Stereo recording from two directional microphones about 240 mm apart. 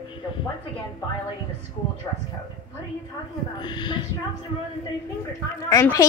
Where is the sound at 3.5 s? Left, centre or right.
Centre.